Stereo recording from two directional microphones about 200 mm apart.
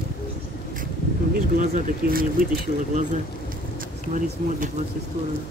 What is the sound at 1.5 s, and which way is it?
Speech, 45° right (ahead or behind).